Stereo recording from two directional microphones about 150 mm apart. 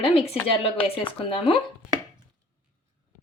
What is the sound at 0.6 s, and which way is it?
Speech, 35° left (ahead or behind).